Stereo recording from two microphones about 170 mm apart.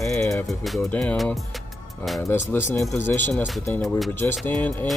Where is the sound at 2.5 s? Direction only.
10° left (ahead or behind).